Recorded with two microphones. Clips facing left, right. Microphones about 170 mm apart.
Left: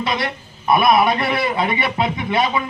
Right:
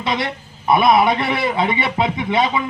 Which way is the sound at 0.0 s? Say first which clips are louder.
Even; 25° right (ahead or behind).